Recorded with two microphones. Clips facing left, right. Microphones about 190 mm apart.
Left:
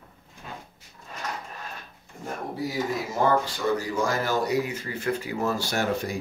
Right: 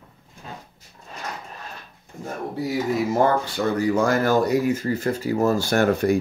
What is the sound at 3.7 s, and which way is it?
Speech, 60° right (ahead or behind).